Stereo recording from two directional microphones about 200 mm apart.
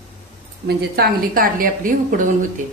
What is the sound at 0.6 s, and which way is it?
Speech, 50° right (ahead or behind).